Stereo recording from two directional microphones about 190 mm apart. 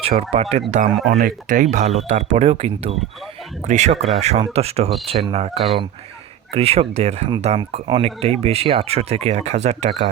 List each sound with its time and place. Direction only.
0.0 s speech: 30° right (ahead or behind)